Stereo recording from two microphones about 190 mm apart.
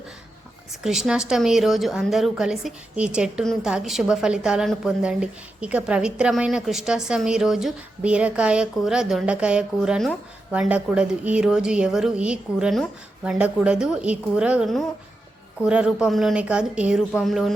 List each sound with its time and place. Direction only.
0.9 s a woman's voice: 5° right (ahead or behind)